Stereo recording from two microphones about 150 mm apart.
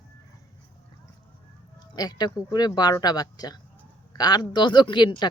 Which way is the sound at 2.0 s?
25° left (ahead or behind).